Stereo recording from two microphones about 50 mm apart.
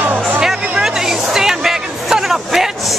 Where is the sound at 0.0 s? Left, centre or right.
Right.